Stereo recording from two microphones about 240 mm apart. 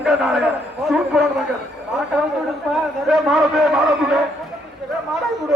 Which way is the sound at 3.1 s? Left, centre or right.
Centre.